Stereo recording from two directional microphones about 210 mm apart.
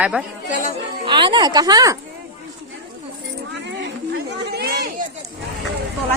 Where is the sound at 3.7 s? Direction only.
55° right (ahead or behind).